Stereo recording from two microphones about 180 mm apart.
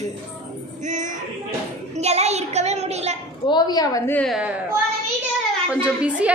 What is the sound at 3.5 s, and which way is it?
Speech, 20° left (ahead or behind).